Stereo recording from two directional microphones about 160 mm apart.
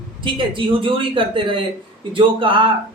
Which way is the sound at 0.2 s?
30° right (ahead or behind).